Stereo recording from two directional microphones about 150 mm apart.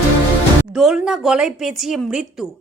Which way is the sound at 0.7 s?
Centre (ahead or behind).